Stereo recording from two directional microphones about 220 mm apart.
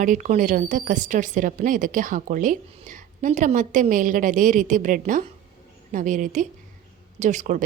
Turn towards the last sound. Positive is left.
turn(degrees=-35)  # may be behind; listen again after turning